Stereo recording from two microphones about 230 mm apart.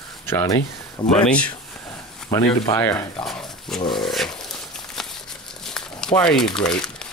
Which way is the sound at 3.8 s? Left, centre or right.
Left.